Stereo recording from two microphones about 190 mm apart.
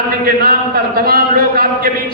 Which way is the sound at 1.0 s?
50° right (ahead or behind).